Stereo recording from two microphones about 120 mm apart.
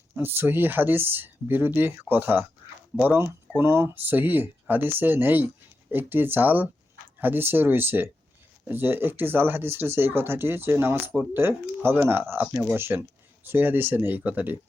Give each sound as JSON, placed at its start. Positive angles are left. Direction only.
{"t": 0.2, "sound": "speech", "side_deg": -15}